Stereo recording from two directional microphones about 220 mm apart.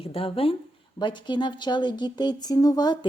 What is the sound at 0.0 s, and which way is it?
A woman's voice, 25° left (ahead or behind).